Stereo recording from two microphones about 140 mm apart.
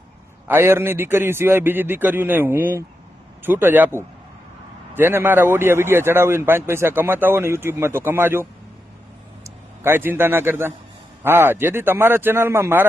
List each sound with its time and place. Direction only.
0.4 s a man's voice: 15° right (ahead or behind)